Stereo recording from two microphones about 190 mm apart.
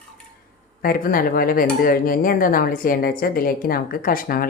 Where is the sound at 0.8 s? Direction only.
50° left (ahead or behind).